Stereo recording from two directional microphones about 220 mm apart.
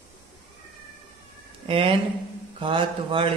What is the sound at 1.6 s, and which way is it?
A man's voice, 25° right (ahead or behind).